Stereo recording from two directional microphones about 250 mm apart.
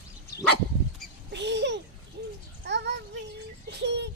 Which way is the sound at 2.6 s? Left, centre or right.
Right.